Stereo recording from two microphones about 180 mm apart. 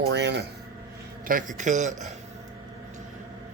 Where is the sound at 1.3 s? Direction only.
50° right (ahead or behind).